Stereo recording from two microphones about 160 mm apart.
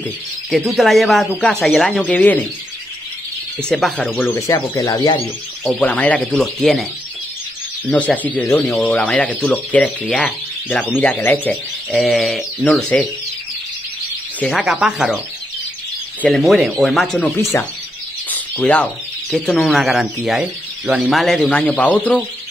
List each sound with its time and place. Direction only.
0.5 s speech: centre (ahead or behind)
3.6 s speech: 5° left (ahead or behind)
4.2 s speech: 20° left (ahead or behind)
5.6 s speech: 5° left (ahead or behind)
14.4 s speech: centre (ahead or behind)
16.2 s speech: centre (ahead or behind)
17.4 s speech: 15° left (ahead or behind)
18.3 s bird: 5° left (ahead or behind)
19.3 s speech: 5° left (ahead or behind)